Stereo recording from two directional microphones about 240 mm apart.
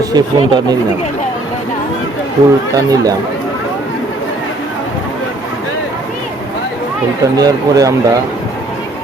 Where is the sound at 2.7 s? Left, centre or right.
Centre.